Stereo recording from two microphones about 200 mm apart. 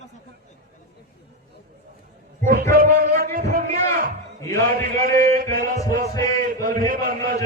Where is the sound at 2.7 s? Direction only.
45° right (ahead or behind).